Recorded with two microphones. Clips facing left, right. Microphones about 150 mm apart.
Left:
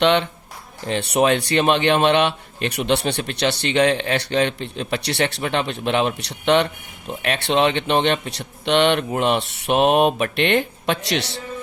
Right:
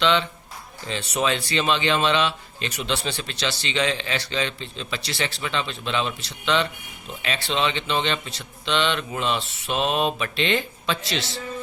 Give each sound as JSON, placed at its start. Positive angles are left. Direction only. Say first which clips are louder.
{"t": 0.0, "sound": "speech", "louder": "left 4 dB", "side_deg": 60}